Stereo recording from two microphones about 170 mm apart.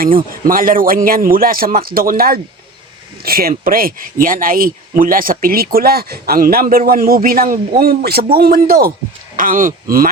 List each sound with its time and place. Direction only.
0.4 s speech: 55° right (ahead or behind)